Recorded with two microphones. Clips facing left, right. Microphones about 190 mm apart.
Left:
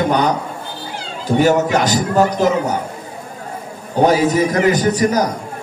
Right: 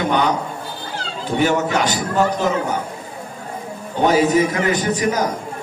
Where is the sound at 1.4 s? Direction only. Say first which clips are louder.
Left 3 dB; 40° left (ahead or behind).